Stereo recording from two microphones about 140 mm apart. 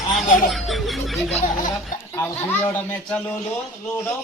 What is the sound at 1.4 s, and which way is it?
Speech, 70° left (ahead or behind).